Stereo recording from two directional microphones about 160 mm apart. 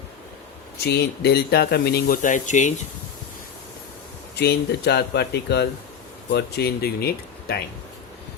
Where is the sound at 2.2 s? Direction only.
50° left (ahead or behind).